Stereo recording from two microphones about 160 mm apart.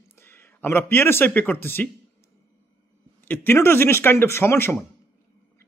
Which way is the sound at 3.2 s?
10° left (ahead or behind).